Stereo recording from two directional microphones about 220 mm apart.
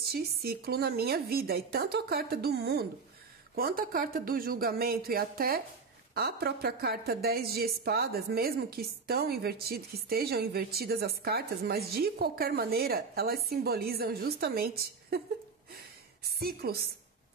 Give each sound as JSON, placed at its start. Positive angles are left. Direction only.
{"t": 0.0, "sound": "a woman's voice", "side_deg": -45}
{"t": 16.3, "sound": "a woman's voice", "side_deg": -45}